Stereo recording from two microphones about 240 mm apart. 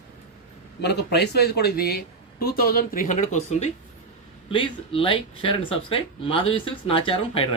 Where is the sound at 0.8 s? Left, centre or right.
Left.